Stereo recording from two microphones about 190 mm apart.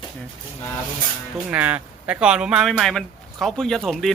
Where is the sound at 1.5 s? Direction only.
10° right (ahead or behind).